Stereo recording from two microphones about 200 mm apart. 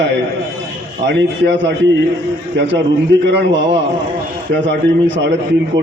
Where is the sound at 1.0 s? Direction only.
65° right (ahead or behind).